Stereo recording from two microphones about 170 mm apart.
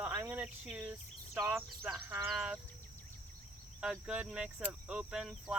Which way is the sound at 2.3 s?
5° right (ahead or behind).